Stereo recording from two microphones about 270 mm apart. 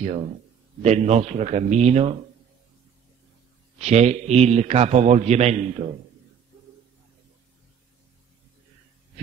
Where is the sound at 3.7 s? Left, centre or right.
Right.